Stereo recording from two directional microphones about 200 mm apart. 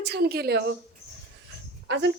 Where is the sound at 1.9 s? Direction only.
60° right (ahead or behind).